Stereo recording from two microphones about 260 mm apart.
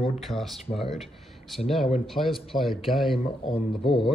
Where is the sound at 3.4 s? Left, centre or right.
Left.